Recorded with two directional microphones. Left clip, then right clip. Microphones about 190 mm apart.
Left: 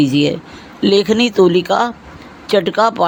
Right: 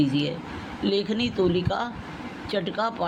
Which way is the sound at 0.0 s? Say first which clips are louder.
Left 11 dB; 60° left (ahead or behind).